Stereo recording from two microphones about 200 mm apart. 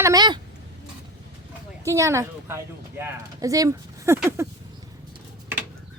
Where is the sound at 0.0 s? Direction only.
20° right (ahead or behind).